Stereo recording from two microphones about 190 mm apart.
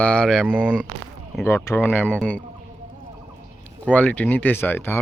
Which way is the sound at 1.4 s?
10° left (ahead or behind).